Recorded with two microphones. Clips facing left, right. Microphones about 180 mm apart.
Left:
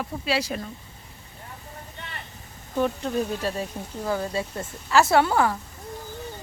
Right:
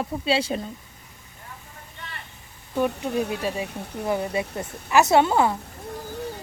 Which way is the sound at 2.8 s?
10° right (ahead or behind).